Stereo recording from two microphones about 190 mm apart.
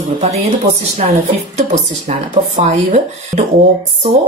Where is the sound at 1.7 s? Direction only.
40° right (ahead or behind).